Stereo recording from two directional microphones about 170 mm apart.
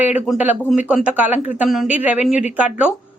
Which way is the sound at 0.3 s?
10° right (ahead or behind).